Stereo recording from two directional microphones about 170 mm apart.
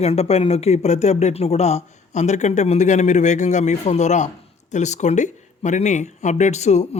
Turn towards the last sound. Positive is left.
turn(degrees=40)  # may be behind; listen again after turning